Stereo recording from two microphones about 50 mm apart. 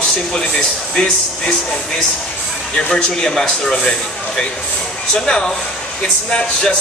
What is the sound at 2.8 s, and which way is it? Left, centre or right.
Speech, centre.